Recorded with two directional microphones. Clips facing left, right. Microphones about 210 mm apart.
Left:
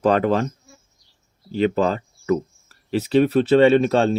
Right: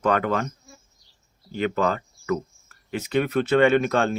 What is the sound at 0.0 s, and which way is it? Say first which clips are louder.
Speech: left 5 dB; 30° left (ahead or behind).